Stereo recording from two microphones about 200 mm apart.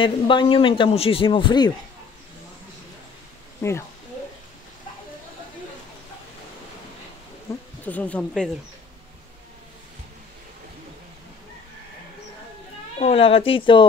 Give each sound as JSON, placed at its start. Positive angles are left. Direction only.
{"t": 0.0, "sound": "a man's voice", "side_deg": 25}
{"t": 3.6, "sound": "speech", "side_deg": 15}
{"t": 7.5, "sound": "speech", "side_deg": 15}
{"t": 13.0, "sound": "a man's voice", "side_deg": 30}